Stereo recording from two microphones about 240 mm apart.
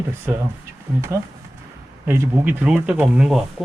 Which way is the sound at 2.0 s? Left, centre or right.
Centre.